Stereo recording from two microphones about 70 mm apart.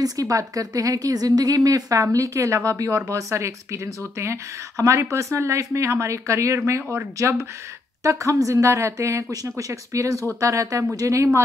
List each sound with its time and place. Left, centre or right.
0.0 s a woman's voice: right
8.0 s speech: right